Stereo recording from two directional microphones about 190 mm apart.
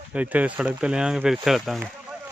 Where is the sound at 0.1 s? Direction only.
5° right (ahead or behind).